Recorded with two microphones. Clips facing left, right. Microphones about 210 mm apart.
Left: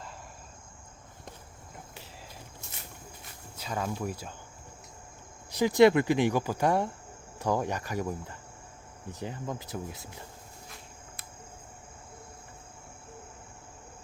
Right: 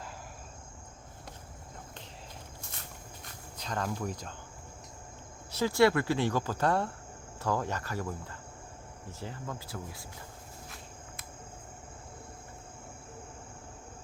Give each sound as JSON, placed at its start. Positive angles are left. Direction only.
{"t": 3.6, "sound": "speech", "side_deg": 5}
{"t": 5.5, "sound": "speech", "side_deg": 15}